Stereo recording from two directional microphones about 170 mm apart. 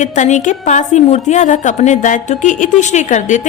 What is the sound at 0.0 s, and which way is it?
A woman's voice, 45° left (ahead or behind).